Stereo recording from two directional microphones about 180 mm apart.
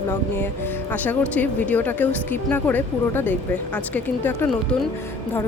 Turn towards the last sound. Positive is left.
turn(degrees=10)  # may be behind; listen again after turning